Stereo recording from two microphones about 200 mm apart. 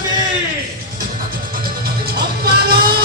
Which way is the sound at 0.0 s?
20° right (ahead or behind).